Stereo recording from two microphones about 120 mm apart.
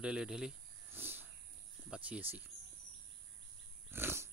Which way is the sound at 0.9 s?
15° right (ahead or behind).